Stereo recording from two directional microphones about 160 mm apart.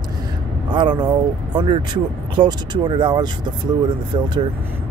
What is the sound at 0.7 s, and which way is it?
Speech, 30° right (ahead or behind).